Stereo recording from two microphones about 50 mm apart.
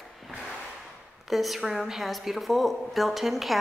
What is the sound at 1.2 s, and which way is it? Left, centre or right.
A woman's voice, centre.